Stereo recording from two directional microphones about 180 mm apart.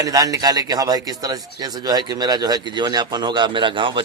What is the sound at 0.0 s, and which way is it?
A man's voice, 20° right (ahead or behind).